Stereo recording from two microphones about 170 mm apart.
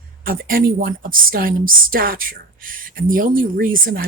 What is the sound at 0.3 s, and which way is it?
A woman's voice, 55° right (ahead or behind).